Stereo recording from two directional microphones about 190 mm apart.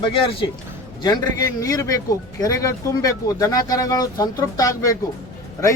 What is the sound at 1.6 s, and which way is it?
Speech, 20° left (ahead or behind).